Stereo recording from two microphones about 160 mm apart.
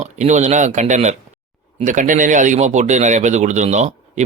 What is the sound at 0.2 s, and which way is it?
A man's voice, 45° right (ahead or behind).